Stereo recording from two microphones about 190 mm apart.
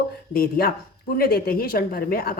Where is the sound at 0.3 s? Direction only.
50° left (ahead or behind).